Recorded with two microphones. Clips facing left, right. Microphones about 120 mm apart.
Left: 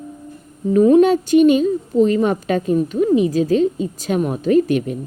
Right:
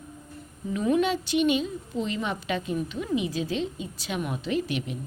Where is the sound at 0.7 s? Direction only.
45° left (ahead or behind).